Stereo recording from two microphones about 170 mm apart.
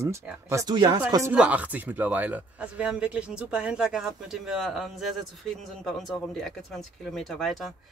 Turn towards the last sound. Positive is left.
turn(degrees=0)  # may be behind; listen again after turning